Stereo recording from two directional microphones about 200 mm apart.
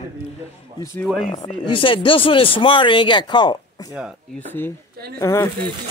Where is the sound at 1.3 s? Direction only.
30° left (ahead or behind).